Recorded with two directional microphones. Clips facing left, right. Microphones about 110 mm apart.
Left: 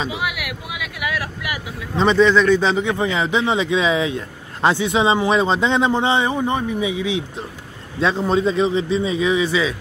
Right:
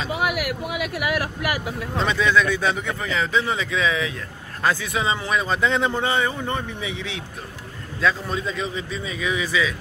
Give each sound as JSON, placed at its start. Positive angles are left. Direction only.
{"t": 0.1, "sound": "a sound", "side_deg": -45}
{"t": 1.1, "sound": "speech", "side_deg": -45}
{"t": 2.0, "sound": "speech", "side_deg": -5}
{"t": 2.9, "sound": "speech", "side_deg": 25}
{"t": 8.0, "sound": "speech", "side_deg": 30}